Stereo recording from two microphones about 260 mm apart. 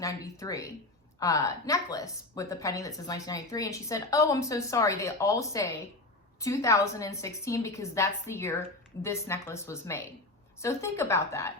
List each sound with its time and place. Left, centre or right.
0.0 s a woman's voice: centre